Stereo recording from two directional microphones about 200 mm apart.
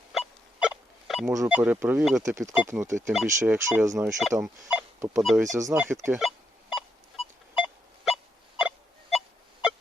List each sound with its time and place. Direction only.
0.1 s a sound: 5° right (ahead or behind)
1.4 s speech: 5° right (ahead or behind)
4.7 s telephone dialing: 15° right (ahead or behind)
5.4 s speech: 15° right (ahead or behind)
6.2 s beep: 5° right (ahead or behind)
7.5 s pulse: 5° right (ahead or behind)